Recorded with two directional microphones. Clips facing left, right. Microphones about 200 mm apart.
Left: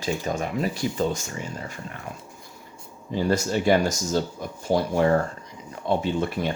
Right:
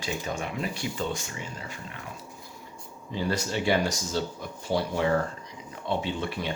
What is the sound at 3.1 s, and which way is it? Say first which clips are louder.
Speech: left 6 dB; 45° left (ahead or behind).